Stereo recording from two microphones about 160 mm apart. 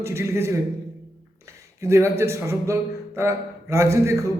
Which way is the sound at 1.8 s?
15° right (ahead or behind).